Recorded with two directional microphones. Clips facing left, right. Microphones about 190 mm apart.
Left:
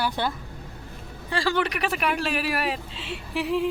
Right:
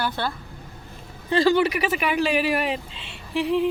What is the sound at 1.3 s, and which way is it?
Speech, 20° right (ahead or behind).